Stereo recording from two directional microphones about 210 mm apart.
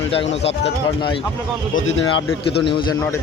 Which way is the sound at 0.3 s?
30° left (ahead or behind).